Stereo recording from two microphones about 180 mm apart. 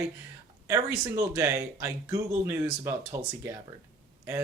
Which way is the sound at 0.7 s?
15° right (ahead or behind).